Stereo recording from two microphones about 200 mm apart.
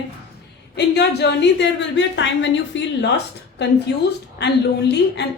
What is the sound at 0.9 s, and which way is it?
Speech, 60° left (ahead or behind).